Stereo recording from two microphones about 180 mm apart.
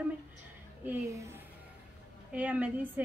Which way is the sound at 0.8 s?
15° right (ahead or behind).